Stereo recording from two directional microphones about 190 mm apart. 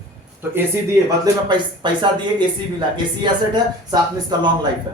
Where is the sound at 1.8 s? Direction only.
25° right (ahead or behind).